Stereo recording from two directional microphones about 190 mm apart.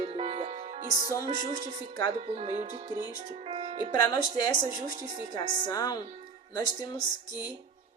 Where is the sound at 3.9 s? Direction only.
20° left (ahead or behind).